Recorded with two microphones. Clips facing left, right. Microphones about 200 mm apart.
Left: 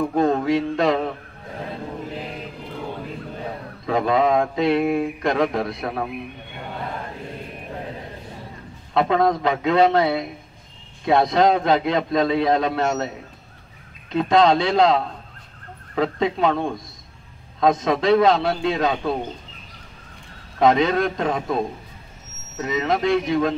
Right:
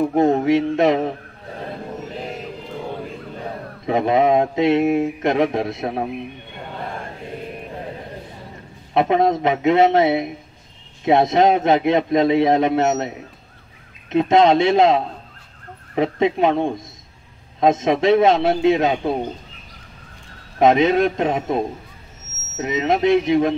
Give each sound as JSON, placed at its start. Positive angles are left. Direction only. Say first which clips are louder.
{"t": 0.0, "sound": "mantra", "louder": "right 3 dB", "side_deg": -20}
{"t": 3.8, "sound": "mantra", "louder": "right 2 dB", "side_deg": -20}
{"t": 8.9, "sound": "mantra", "louder": "right 2 dB", "side_deg": -20}
{"t": 20.5, "sound": "mantra", "louder": "right 3 dB", "side_deg": -20}